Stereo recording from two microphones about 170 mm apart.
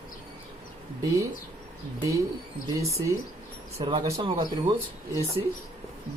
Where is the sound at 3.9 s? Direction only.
25° right (ahead or behind).